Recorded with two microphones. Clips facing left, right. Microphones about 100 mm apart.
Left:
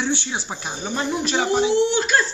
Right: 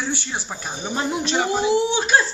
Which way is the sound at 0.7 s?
10° right (ahead or behind).